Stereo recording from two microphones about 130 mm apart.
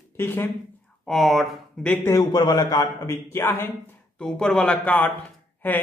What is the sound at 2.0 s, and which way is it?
A man's voice, 25° left (ahead or behind).